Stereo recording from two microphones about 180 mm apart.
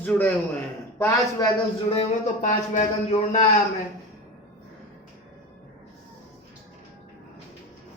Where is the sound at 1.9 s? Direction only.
45° left (ahead or behind).